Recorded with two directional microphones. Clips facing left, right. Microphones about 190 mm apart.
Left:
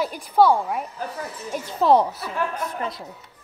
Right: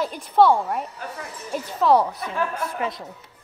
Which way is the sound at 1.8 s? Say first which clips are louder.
Left 1 dB; 25° left (ahead or behind).